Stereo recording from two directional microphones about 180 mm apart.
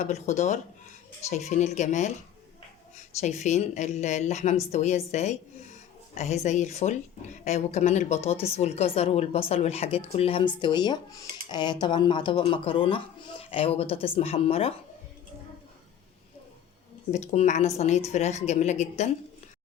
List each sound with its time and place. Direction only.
0.0 s a woman's voice: 40° left (ahead or behind)
3.2 s a woman's voice: 40° left (ahead or behind)
10.1 s dishes: 35° left (ahead or behind)
13.4 s a woman's voice: 30° left (ahead or behind)
17.1 s a woman's voice: 40° left (ahead or behind)